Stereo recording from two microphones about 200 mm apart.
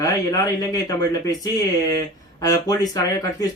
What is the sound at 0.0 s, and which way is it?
Speech, 15° left (ahead or behind).